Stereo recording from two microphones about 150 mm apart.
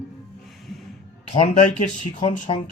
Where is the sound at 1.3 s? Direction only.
45° left (ahead or behind).